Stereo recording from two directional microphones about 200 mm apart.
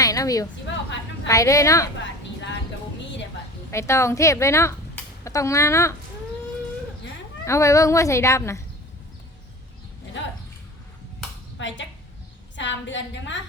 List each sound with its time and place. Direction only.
0.0 s a sound: 15° left (ahead or behind)
1.3 s speech: 15° left (ahead or behind)
3.7 s speech: 15° left (ahead or behind)
7.4 s speech: 15° left (ahead or behind)
11.5 s a woman's voice: 65° left (ahead or behind)